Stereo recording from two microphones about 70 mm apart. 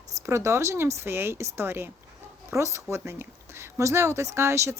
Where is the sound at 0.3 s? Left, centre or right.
Right.